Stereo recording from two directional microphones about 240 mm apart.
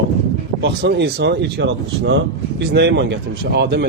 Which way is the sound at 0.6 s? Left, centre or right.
Right.